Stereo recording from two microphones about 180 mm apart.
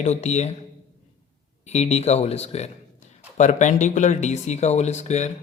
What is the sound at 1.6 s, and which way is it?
Speech, 35° left (ahead or behind).